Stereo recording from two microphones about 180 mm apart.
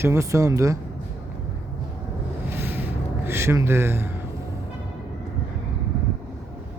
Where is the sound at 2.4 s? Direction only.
10° right (ahead or behind).